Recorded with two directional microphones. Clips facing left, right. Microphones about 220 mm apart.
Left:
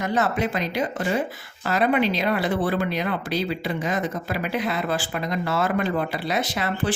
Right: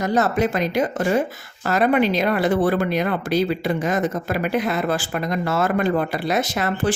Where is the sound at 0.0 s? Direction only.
40° right (ahead or behind).